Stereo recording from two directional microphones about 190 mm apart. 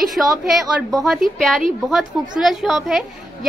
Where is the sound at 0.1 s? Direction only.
Centre (ahead or behind).